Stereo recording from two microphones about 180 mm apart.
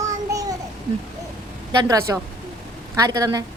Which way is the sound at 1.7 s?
20° right (ahead or behind).